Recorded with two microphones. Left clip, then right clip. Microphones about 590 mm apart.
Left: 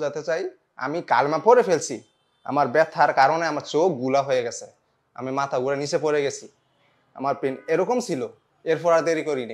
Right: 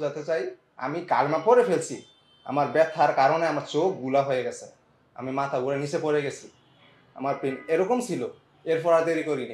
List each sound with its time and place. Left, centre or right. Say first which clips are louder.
0.0 s a man's voice: left 2 dB; left